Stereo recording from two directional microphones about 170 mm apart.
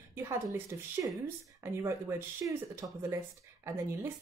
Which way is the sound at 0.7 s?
15° right (ahead or behind).